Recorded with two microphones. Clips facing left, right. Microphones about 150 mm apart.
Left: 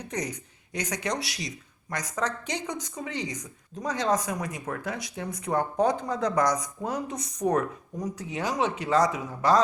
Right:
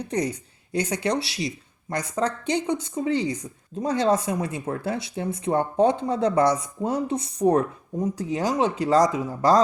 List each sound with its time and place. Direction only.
0.0 s speech: 30° right (ahead or behind)